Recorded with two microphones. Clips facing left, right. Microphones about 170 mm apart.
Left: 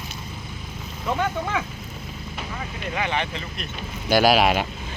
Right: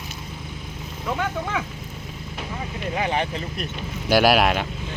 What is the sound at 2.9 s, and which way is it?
Speech, 40° right (ahead or behind).